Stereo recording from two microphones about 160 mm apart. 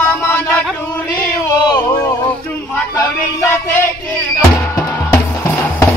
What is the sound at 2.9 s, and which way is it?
Music, 20° left (ahead or behind).